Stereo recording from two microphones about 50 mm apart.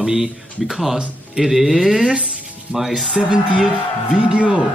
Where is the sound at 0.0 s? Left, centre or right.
Centre.